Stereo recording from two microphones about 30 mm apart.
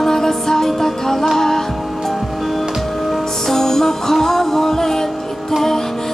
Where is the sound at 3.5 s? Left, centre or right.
Centre.